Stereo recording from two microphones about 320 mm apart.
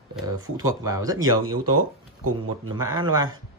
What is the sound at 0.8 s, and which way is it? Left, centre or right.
Speech, centre.